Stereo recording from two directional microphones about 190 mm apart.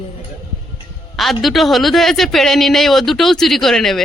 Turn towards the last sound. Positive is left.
turn(degrees=0)  # may be behind; listen again after turning